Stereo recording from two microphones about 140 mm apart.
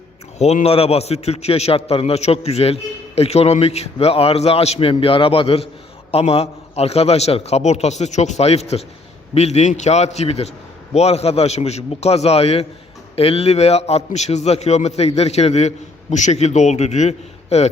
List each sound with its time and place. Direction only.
0.3 s a man's voice: 50° left (ahead or behind)